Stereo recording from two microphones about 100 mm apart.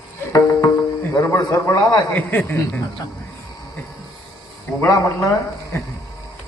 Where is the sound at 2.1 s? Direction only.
15° left (ahead or behind).